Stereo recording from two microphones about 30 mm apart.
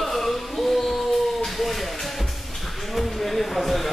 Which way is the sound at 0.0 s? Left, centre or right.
Centre.